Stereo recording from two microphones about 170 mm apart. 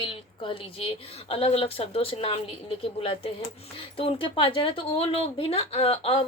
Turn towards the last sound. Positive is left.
turn(degrees=35)  # may be behind; listen again after turning